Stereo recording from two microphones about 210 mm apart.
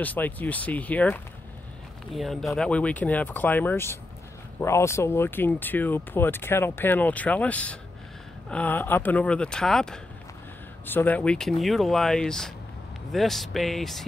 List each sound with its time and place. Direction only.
0.0 s speech: 10° left (ahead or behind)